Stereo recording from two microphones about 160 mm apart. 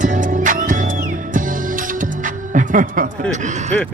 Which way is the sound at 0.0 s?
55° right (ahead or behind).